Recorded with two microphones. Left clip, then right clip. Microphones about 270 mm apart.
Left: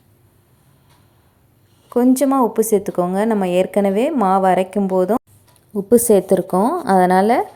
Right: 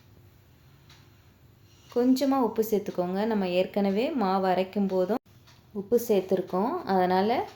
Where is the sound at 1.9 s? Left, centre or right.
Left.